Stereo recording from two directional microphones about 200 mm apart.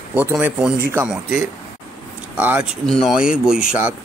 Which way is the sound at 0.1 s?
10° right (ahead or behind).